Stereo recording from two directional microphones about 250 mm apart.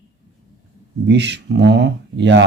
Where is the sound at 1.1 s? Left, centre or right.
Right.